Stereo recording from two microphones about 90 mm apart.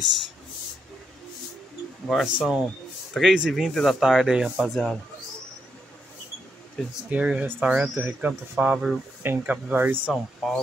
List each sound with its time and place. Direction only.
2.0 s speech: centre (ahead or behind)
2.3 s speech: 10° right (ahead or behind)
7.1 s speech: 15° right (ahead or behind)
10.1 s speech: 5° left (ahead or behind)